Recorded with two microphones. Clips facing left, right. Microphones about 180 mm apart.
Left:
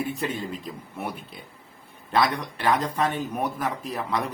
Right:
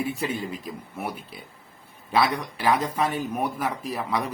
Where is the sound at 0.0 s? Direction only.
5° right (ahead or behind).